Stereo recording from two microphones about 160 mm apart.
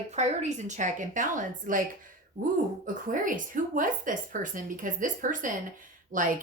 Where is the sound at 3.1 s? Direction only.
55° right (ahead or behind).